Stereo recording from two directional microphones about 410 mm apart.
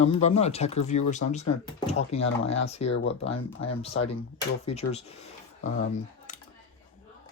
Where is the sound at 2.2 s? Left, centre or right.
Left.